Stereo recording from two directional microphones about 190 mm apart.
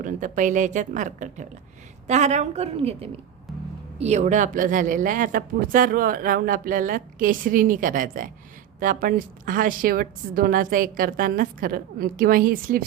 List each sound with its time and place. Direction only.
0.0 s speech: 45° right (ahead or behind)